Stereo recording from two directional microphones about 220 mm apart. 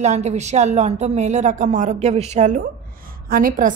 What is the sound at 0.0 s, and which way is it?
A woman's voice, 30° right (ahead or behind).